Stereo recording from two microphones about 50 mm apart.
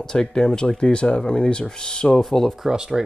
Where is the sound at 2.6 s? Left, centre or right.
Centre.